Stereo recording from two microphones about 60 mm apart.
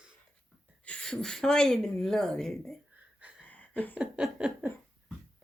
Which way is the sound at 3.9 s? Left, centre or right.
Centre.